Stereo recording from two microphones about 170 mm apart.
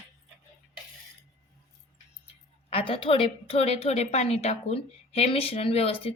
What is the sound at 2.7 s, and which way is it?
A woman's voice, 30° left (ahead or behind).